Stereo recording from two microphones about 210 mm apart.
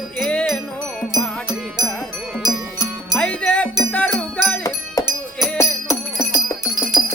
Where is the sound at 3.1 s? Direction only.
5° left (ahead or behind).